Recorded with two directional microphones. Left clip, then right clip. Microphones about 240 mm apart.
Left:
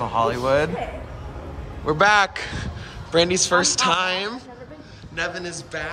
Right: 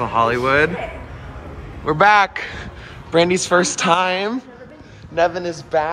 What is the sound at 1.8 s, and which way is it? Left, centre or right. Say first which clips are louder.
Speech: right 4 dB; centre.